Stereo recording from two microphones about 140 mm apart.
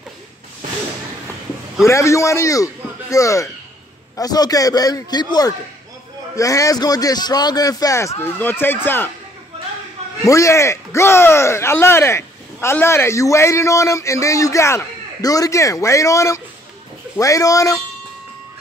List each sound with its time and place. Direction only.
1.9 s a man's voice: 20° left (ahead or behind)
10.2 s speech: 20° left (ahead or behind)